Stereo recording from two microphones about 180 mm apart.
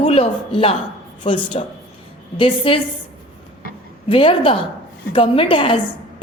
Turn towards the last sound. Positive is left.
turn(degrees=30)  # may be behind; listen again after turning